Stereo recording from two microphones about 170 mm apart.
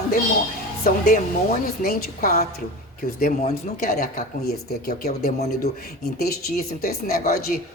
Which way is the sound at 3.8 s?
55° left (ahead or behind).